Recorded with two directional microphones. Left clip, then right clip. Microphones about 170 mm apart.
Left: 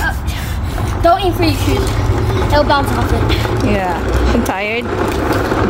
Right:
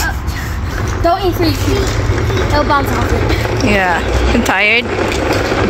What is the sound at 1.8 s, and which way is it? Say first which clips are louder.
Speech: right 1 dB; 80° left.